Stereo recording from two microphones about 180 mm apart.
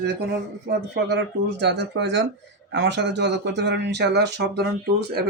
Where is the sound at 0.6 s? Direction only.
70° right (ahead or behind).